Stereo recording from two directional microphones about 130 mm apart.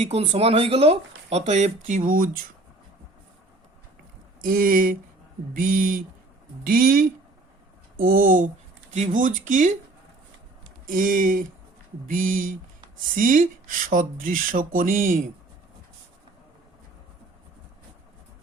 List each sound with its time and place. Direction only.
0.0 s speech: 50° right (ahead or behind); by 2.3 s 90° right
4.4 s speech: 90° right
7.9 s speech: 90° right
8.9 s speech: 75° right (ahead or behind)
10.8 s speech: 90° right